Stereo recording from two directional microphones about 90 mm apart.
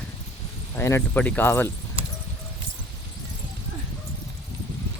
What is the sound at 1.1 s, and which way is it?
Speech, 20° left (ahead or behind).